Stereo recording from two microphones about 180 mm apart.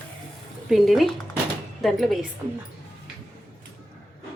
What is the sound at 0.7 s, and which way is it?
Speech, centre (ahead or behind).